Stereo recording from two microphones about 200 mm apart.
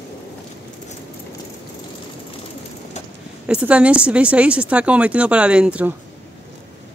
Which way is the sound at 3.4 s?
5° right (ahead or behind).